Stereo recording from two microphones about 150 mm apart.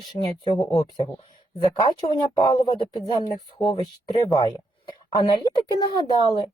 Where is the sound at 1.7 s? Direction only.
30° left (ahead or behind).